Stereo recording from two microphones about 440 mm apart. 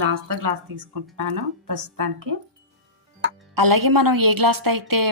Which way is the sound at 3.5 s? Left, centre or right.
Right.